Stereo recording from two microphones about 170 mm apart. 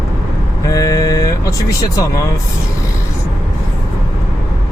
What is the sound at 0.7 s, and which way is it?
Speech, 20° left (ahead or behind).